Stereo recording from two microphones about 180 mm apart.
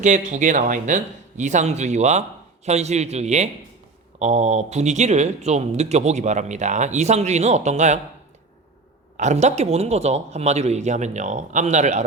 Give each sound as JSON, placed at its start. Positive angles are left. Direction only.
{"t": 0.0, "sound": "speech", "side_deg": -45}
{"t": 9.1, "sound": "speech", "side_deg": -40}